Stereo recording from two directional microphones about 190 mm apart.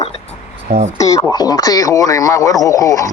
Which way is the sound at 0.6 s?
35° right (ahead or behind).